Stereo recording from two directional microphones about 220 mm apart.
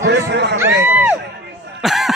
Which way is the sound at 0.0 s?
50° right (ahead or behind).